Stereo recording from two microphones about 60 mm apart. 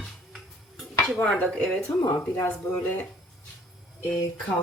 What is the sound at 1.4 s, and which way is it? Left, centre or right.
Speech, left.